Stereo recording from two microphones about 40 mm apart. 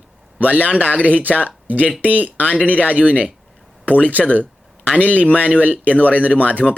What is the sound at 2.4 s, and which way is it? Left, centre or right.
Speech, left.